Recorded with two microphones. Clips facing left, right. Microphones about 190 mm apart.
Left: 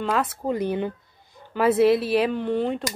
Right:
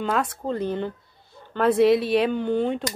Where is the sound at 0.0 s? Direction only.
Centre (ahead or behind).